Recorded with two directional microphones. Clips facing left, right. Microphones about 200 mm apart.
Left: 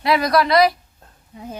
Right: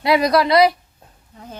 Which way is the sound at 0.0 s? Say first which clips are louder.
Right 2 dB; 25° right (ahead or behind).